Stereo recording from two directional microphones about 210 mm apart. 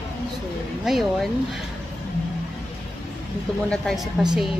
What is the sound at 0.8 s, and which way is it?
Speech, centre (ahead or behind).